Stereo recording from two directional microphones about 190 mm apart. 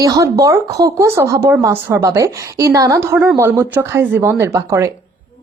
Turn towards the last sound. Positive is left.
turn(degrees=-15)  # may be behind; listen again after turning